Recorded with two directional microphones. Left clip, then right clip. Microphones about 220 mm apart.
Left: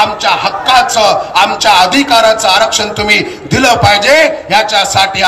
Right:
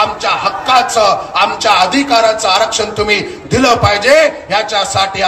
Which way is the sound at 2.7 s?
45° left (ahead or behind).